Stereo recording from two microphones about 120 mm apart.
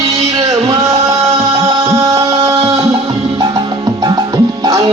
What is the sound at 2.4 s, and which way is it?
Music, 55° right (ahead or behind).